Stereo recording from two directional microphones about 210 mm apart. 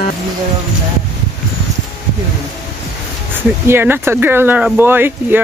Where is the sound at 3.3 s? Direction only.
10° right (ahead or behind).